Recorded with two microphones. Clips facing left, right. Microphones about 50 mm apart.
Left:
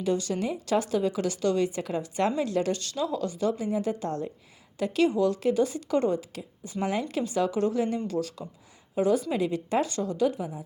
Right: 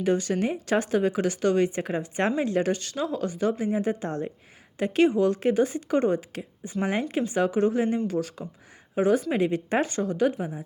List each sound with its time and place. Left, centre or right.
0.0 s speech: right